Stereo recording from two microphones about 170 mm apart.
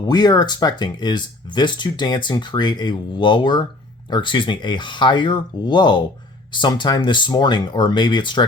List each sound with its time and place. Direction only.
0.0 s speech: 25° left (ahead or behind)